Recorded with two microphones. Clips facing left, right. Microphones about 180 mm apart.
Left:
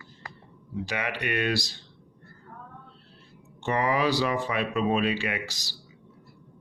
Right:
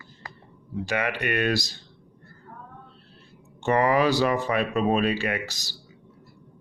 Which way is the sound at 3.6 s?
50° right (ahead or behind).